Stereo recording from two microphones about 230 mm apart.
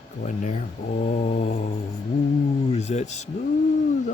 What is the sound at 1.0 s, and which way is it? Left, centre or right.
Speech, left.